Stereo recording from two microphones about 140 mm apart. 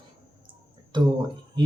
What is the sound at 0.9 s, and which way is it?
Speech, 35° right (ahead or behind).